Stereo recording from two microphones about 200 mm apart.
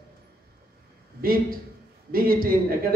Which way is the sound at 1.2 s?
45° right (ahead or behind).